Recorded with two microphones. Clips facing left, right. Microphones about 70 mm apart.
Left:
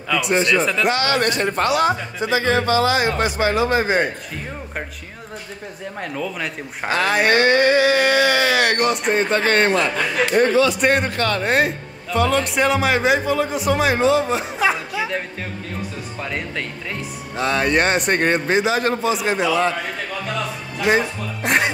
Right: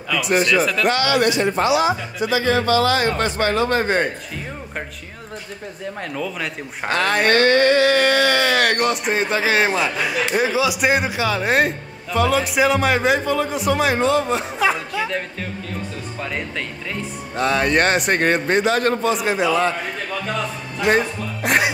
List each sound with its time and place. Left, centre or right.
0.1 s speech: centre
1.0 s speech: left
2.1 s a man's voice: left; by 4.1 s centre
5.9 s speech: centre